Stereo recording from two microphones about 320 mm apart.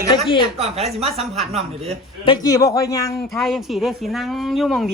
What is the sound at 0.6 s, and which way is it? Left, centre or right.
Speech, centre.